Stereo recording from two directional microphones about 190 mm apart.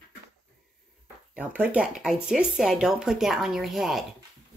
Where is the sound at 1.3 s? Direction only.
10° right (ahead or behind).